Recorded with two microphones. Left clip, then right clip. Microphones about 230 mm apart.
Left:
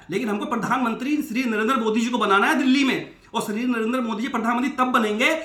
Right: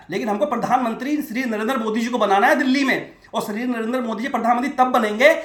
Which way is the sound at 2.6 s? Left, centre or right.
Left.